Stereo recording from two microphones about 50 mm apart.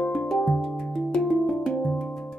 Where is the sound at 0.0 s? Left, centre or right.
Centre.